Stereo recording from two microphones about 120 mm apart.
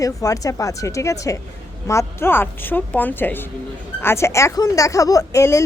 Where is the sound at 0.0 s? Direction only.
30° left (ahead or behind).